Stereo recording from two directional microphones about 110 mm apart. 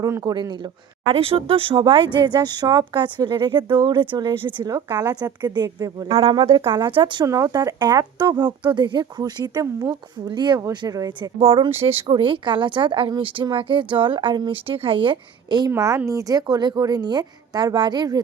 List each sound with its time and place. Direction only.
0.0 s speech: 35° right (ahead or behind)
6.1 s speech: 60° right (ahead or behind)
7.3 s speech: 30° right (ahead or behind)
10.2 s speech: 45° right (ahead or behind)
11.2 s speech: 55° right (ahead or behind)
16.0 s speech: 30° right (ahead or behind)